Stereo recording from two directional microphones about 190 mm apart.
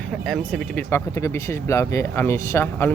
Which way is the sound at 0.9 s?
15° left (ahead or behind).